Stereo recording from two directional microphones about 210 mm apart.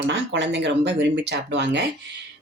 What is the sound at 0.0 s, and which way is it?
Speech, 60° right (ahead or behind).